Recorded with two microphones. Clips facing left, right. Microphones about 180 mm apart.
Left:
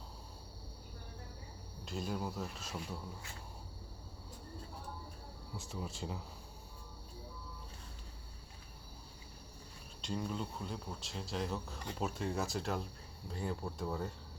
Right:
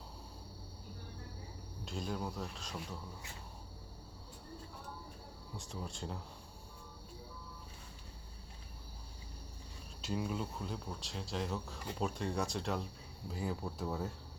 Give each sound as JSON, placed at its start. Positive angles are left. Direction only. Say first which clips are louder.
{"t": 1.8, "sound": "speech", "louder": "left 1 dB", "side_deg": 0}
{"t": 5.5, "sound": "speech", "louder": "left 1 dB", "side_deg": 0}
{"t": 10.0, "sound": "speech", "louder": "right 1 dB", "side_deg": -5}